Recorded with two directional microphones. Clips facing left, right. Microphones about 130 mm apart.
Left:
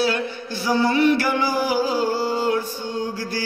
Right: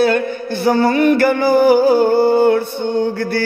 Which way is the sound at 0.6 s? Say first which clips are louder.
Right 5 dB; 55° right (ahead or behind).